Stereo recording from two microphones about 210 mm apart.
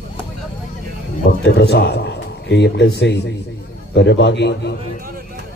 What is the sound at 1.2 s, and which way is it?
A man's voice, 50° left (ahead or behind).